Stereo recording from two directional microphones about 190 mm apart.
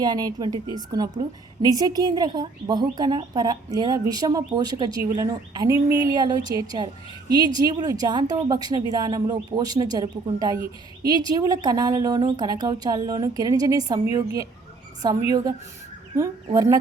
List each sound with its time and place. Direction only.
0.0 s speech: 20° right (ahead or behind)